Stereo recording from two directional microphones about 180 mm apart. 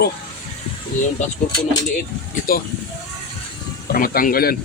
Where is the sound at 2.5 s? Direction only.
55° left (ahead or behind).